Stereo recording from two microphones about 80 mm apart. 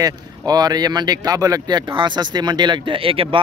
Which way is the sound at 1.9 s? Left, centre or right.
Right.